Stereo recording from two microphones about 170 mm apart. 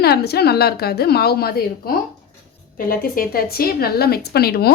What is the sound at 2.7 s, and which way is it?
A woman's voice, 60° left (ahead or behind).